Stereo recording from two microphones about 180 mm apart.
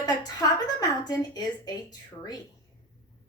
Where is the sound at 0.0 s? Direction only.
20° left (ahead or behind).